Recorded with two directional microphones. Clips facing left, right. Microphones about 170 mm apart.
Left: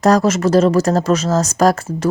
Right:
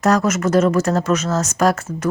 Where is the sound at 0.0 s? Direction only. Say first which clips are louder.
Left 3 dB; 35° left (ahead or behind).